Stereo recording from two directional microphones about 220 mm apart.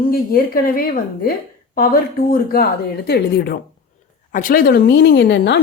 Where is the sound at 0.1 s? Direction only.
40° left (ahead or behind).